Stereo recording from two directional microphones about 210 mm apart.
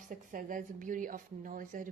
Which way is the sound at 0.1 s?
40° right (ahead or behind).